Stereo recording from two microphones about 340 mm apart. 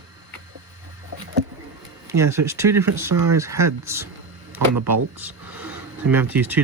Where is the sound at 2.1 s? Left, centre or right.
Centre.